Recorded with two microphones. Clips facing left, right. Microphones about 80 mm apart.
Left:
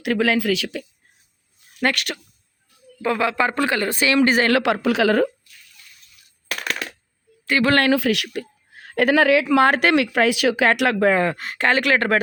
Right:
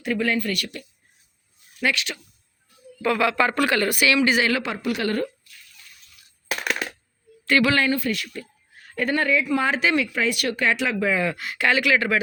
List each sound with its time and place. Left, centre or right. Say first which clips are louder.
0.0 s speech: left 4 dB; left
1.8 s speech: left 3 dB; left
3.0 s speech: even; left
4.5 s a woman's voice: left 8 dB; left
6.7 s coin: right 1 dB; centre
7.7 s a woman's voice: left 5 dB; left